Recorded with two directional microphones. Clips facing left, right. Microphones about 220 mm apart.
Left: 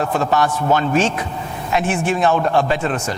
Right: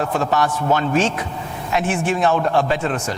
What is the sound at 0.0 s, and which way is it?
A man's voice, 20° left (ahead or behind).